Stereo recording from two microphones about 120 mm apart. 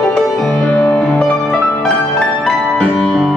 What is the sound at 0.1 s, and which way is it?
Music, 5° left (ahead or behind).